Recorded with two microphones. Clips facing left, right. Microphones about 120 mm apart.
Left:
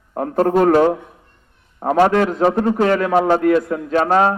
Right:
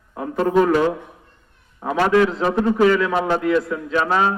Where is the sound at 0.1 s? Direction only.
50° left (ahead or behind).